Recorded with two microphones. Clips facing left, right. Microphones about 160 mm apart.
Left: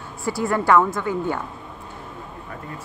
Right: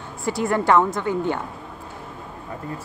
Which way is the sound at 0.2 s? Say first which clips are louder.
Right 1 dB; 20° right (ahead or behind).